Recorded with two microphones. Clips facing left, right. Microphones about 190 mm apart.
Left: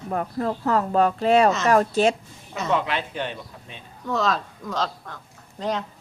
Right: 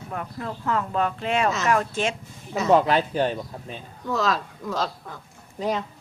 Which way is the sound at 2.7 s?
40° right (ahead or behind).